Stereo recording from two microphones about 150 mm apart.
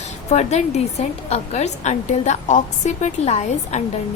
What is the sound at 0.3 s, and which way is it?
A woman's voice, 50° left (ahead or behind).